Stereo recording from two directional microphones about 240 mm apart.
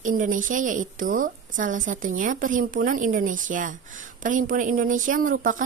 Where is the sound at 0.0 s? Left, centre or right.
Right.